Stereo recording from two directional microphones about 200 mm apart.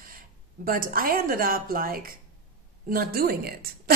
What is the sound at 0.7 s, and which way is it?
A woman's voice, 45° right (ahead or behind).